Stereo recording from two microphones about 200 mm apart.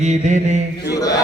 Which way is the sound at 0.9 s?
15° left (ahead or behind).